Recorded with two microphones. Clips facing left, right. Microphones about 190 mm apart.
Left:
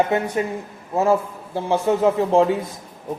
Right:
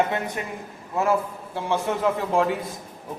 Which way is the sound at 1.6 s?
30° left (ahead or behind).